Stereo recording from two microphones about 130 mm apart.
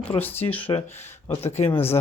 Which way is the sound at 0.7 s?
60° left (ahead or behind).